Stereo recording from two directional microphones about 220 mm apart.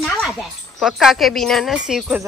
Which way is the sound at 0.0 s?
Centre (ahead or behind).